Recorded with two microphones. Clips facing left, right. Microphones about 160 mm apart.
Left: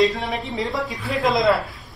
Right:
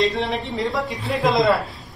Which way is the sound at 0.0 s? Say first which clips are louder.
Left 1 dB; centre (ahead or behind).